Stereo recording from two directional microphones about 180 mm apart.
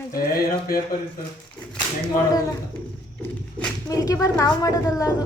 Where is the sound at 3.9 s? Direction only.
20° left (ahead or behind).